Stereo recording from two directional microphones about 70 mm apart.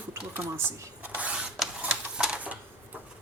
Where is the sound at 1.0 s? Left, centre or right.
Right.